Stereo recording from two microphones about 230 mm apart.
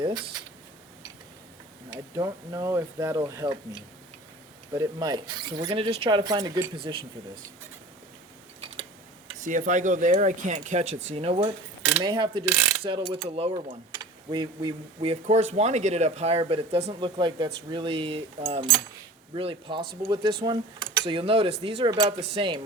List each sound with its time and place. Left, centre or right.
1.9 s speech: centre
4.7 s mechanisms: centre
8.7 s clock: right
9.4 s speech: right
11.1 s mechanisms: right
19.8 s speech: right
20.4 s speech: centre
21.6 s mechanisms: right